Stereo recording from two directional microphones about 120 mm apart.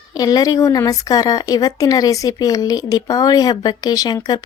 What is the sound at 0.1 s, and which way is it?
Speech, 35° left (ahead or behind).